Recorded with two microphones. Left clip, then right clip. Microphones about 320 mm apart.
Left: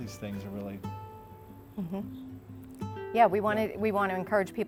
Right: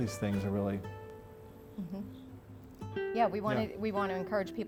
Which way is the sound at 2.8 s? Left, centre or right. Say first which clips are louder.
Right 2 dB; centre.